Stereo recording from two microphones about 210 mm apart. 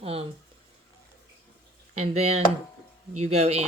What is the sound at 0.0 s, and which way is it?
Speech, 30° right (ahead or behind).